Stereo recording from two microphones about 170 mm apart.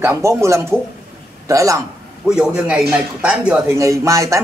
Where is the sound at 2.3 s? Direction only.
5° right (ahead or behind).